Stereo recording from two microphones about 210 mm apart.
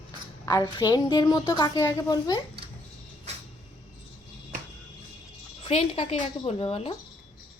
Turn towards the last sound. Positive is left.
turn(degrees=30)  # may be behind; listen again after turning